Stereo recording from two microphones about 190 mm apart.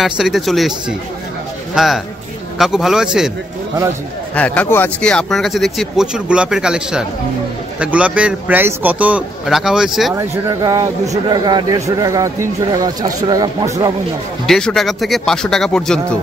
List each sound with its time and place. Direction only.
0.0 s speech: centre (ahead or behind)
4.4 s speech: 10° left (ahead or behind)
10.1 s speech: 20° right (ahead or behind)
14.4 s speech: centre (ahead or behind)